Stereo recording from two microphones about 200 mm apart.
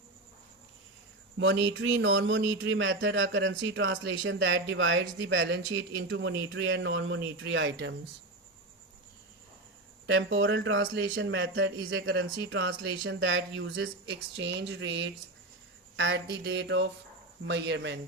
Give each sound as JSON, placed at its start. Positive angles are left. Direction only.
{"t": 1.4, "sound": "speech", "side_deg": -75}
{"t": 10.1, "sound": "speech", "side_deg": -70}
{"t": 16.0, "sound": "mantra", "side_deg": -65}